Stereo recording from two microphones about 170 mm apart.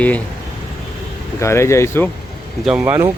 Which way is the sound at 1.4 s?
15° left (ahead or behind).